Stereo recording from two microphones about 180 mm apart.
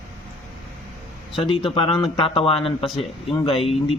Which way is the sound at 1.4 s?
30° left (ahead or behind).